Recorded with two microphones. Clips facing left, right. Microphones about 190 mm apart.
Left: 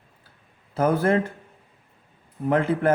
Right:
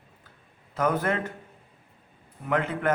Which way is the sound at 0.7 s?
30° left (ahead or behind).